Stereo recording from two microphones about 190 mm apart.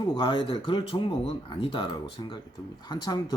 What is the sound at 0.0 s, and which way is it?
Speech, 25° left (ahead or behind).